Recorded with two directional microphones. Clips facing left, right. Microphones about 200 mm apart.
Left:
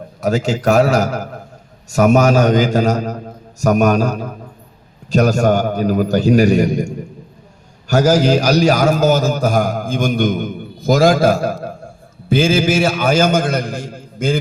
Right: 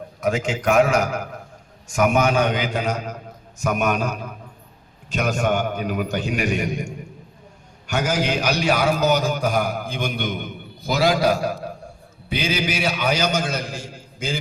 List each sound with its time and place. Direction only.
0.2 s a man's voice: 40° left (ahead or behind); by 14.3 s 55° left (ahead or behind)